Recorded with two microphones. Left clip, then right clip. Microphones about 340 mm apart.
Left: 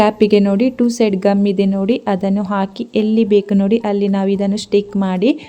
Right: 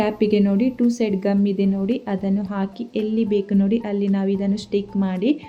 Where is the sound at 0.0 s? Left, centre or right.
Left.